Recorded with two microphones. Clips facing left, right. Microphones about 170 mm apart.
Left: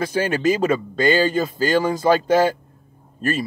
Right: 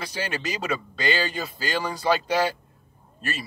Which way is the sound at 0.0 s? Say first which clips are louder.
Left 11 dB; 50° left (ahead or behind).